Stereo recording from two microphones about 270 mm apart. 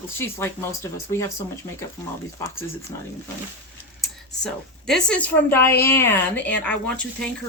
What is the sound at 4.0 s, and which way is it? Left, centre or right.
A woman's voice, centre.